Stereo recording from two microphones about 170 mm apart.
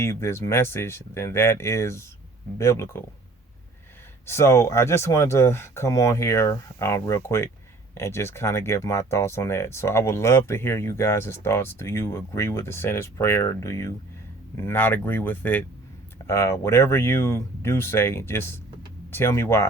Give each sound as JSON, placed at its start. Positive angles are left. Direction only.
{"t": 0.0, "sound": "speech", "side_deg": 15}
{"t": 4.3, "sound": "speech", "side_deg": 15}